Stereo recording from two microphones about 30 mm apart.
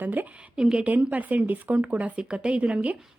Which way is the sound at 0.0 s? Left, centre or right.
Right.